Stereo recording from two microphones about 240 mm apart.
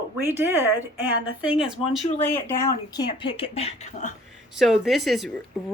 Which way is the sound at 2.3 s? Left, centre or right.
Centre.